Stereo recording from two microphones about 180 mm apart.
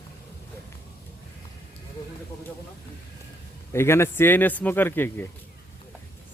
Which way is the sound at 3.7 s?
15° left (ahead or behind).